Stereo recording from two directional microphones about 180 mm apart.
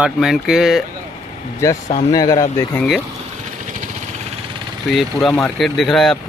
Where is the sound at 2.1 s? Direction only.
20° left (ahead or behind).